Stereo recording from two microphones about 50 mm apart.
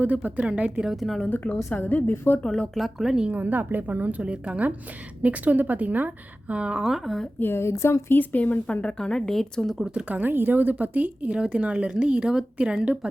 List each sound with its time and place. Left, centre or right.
0.0 s speech: right
0.9 s speech: centre
1.7 s a woman's voice: left
2.4 s a woman's voice: centre
2.7 s speech: centre
3.3 s a woman's voice: right
6.8 s speech: centre
7.3 s a woman's voice: left
7.6 s a woman's voice: left
8.1 s a woman's voice: left
8.6 s a woman's voice: left
10.1 s a woman's voice: right